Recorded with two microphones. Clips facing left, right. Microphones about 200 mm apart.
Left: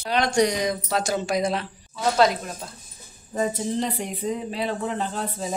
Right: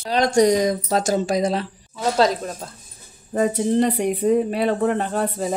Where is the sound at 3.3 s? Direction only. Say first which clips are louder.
Right 6 dB; 60° right (ahead or behind).